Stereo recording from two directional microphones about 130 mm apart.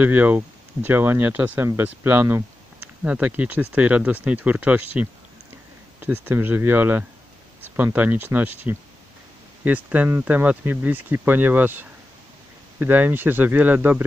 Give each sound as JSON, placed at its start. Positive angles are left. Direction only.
{"t": 0.0, "sound": "speech", "side_deg": -15}